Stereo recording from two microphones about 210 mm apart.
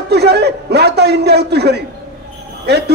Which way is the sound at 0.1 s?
50° right (ahead or behind).